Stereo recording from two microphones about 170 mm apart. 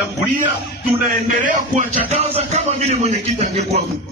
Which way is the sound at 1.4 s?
50° right (ahead or behind).